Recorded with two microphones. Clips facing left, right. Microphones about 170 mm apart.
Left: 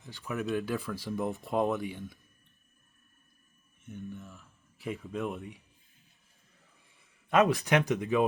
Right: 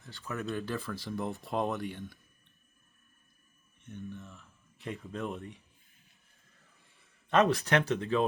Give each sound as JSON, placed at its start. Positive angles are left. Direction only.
{"t": 0.0, "sound": "speech", "side_deg": 15}
{"t": 0.7, "sound": "speech", "side_deg": 5}
{"t": 3.8, "sound": "speech", "side_deg": 0}
{"t": 7.3, "sound": "speech", "side_deg": 0}
{"t": 7.5, "sound": "speech", "side_deg": 15}